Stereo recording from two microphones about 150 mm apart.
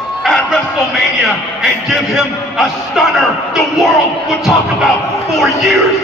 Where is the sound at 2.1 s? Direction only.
Centre (ahead or behind).